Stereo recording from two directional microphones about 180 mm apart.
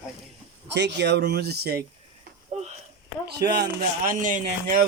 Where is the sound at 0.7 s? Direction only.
70° right (ahead or behind).